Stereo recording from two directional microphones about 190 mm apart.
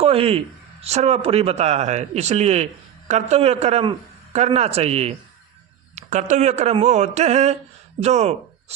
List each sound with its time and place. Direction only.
0.0 s a man's voice: 30° right (ahead or behind)